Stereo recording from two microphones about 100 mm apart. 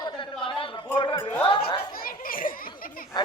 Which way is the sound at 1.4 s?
55° left (ahead or behind).